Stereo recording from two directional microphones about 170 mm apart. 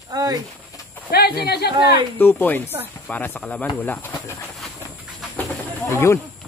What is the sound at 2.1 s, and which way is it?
Speech, 10° left (ahead or behind).